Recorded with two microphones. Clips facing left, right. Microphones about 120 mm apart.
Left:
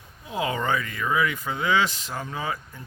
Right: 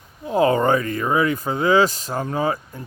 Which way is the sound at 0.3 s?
40° right (ahead or behind).